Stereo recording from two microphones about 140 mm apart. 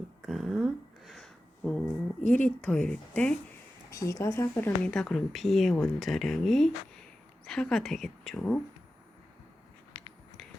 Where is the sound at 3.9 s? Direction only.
20° left (ahead or behind).